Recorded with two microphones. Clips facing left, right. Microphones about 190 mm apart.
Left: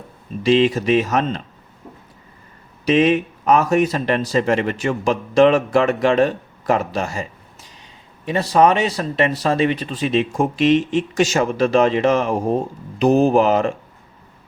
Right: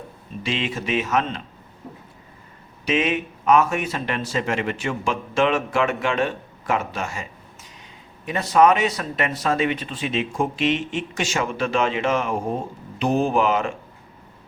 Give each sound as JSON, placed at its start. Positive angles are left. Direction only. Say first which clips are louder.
{"t": 0.4, "sound": "speech", "louder": "left 11 dB", "side_deg": 40}
{"t": 2.8, "sound": "speech", "louder": "left 7 dB", "side_deg": 35}